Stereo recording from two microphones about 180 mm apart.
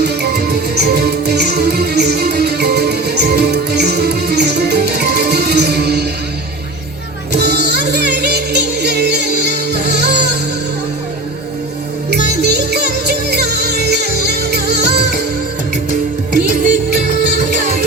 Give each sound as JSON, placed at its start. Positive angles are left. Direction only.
{"t": 0.0, "sound": "music", "side_deg": -65}
{"t": 7.3, "sound": "music", "side_deg": -65}
{"t": 12.1, "sound": "music", "side_deg": -65}